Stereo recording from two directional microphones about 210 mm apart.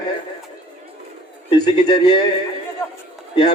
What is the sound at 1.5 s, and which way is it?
Speech, 20° left (ahead or behind).